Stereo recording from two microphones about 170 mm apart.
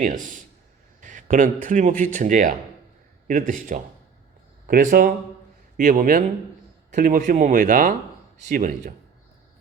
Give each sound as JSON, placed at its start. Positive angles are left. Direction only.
{"t": 0.0, "sound": "speech", "side_deg": -50}
{"t": 1.0, "sound": "a sound", "side_deg": -50}
{"t": 1.6, "sound": "speech", "side_deg": -50}